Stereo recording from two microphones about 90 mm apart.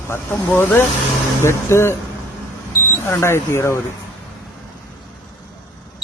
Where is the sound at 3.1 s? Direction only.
30° left (ahead or behind).